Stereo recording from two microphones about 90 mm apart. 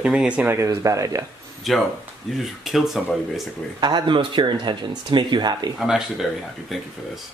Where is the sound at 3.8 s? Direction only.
55° right (ahead or behind).